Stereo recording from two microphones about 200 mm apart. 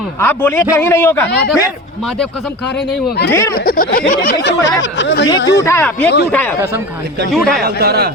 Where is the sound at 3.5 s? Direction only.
45° left (ahead or behind).